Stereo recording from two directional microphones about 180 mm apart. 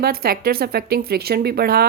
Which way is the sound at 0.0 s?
60° right (ahead or behind).